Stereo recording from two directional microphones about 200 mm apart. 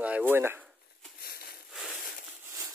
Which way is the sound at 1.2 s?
50° left (ahead or behind).